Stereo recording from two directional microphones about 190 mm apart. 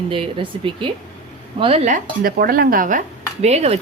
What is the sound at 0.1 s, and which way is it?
Speech, 25° right (ahead or behind).